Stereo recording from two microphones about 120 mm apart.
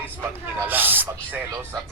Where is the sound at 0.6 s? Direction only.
15° right (ahead or behind).